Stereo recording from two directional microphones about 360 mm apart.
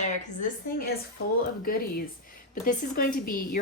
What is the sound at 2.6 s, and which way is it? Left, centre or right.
Speech, left.